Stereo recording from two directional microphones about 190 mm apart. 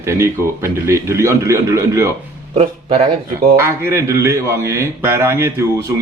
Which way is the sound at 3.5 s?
15° right (ahead or behind).